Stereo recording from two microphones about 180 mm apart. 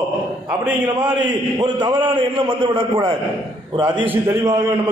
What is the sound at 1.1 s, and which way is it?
A man's voice, 25° right (ahead or behind).